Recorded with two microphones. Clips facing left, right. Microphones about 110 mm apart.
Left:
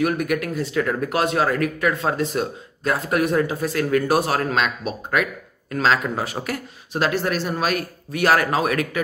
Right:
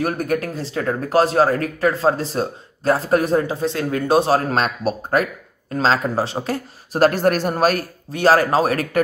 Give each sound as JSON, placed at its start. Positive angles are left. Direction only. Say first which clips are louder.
{"t": 0.0, "sound": "speech", "louder": "even", "side_deg": -35}
{"t": 6.9, "sound": "speech", "louder": "right 6 dB", "side_deg": -45}